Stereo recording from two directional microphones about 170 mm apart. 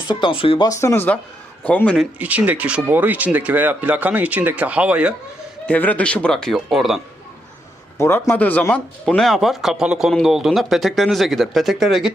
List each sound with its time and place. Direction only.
0.1 s speech: 30° left (ahead or behind)
0.7 s speech: 15° left (ahead or behind)
2.1 s speech: 10° right (ahead or behind)
5.6 s speech: 10° left (ahead or behind)
7.9 s speech: 15° left (ahead or behind); by 12.1 s centre (ahead or behind)